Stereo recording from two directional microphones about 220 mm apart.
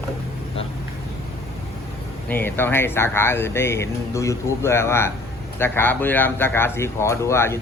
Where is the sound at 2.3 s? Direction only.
10° left (ahead or behind).